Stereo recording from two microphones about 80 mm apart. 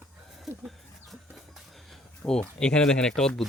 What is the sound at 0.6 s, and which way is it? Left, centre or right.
Chicken, centre.